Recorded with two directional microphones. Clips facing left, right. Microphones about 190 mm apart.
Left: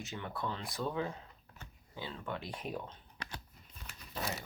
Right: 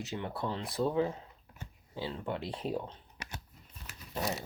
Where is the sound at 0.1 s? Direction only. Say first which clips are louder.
Right 3 dB; 30° right (ahead or behind).